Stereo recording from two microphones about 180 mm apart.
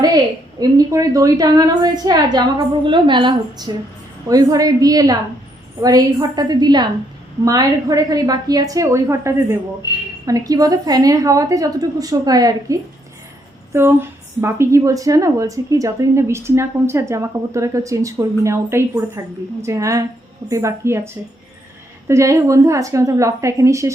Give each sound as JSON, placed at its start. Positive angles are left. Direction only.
{"t": 0.6, "sound": "a woman's voice", "side_deg": -20}